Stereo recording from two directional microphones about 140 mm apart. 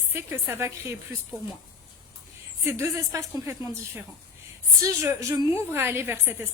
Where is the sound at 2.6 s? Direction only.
20° right (ahead or behind).